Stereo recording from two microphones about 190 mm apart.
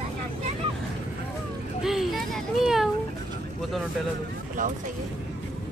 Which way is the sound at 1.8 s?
Centre (ahead or behind).